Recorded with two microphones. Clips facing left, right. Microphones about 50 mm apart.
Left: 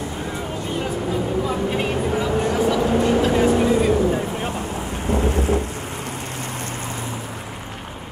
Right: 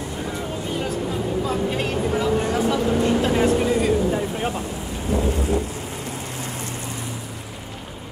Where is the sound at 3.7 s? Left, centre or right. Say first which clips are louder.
Left 2 dB; centre.